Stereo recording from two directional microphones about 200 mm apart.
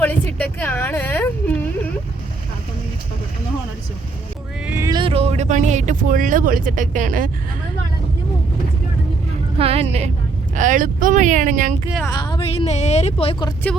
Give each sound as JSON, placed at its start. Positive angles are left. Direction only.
{"t": 0.0, "sound": "a sound", "side_deg": 10}
{"t": 4.6, "sound": "speech", "side_deg": -10}
{"t": 9.6, "sound": "speech", "side_deg": -30}
{"t": 12.0, "sound": "speech", "side_deg": 20}